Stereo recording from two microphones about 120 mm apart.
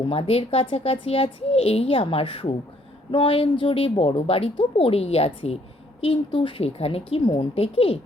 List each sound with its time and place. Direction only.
0.1 s a woman's voice: 55° left (ahead or behind)